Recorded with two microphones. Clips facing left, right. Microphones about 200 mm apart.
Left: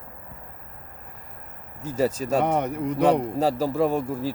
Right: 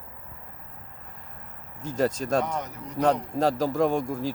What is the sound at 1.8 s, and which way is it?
Speech, 10° left (ahead or behind).